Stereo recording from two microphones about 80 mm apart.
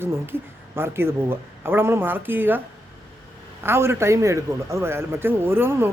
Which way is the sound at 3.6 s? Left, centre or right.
Right.